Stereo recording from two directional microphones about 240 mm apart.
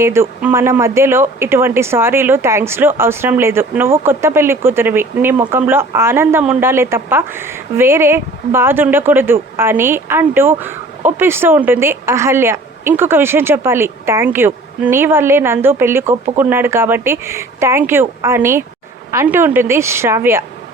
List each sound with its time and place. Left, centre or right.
0.0 s speech: centre